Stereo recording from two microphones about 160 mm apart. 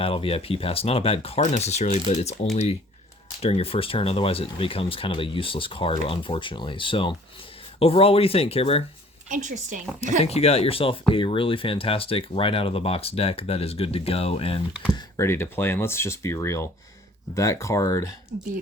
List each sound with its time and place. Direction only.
0.0 s speech: 35° left (ahead or behind)
9.3 s a woman's voice: 50° right (ahead or behind)
10.2 s speech: 40° left (ahead or behind)
14.9 s speech: 20° left (ahead or behind)